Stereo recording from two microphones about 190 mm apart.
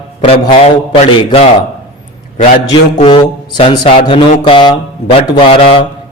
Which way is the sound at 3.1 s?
25° left (ahead or behind).